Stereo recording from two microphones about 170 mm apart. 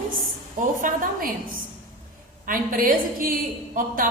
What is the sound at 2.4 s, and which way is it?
Speech, 55° right (ahead or behind).